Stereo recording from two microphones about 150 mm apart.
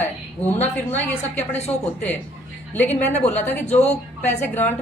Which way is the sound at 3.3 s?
15° left (ahead or behind).